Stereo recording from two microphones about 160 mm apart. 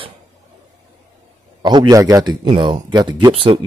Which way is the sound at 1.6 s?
25° right (ahead or behind).